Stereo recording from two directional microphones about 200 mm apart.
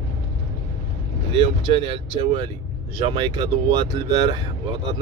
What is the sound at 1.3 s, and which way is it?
Speech, 25° right (ahead or behind).